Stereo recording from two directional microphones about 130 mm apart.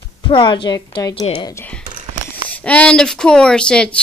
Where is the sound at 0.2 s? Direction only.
40° left (ahead or behind).